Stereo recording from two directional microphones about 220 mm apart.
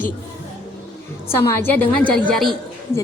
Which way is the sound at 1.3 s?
10° left (ahead or behind).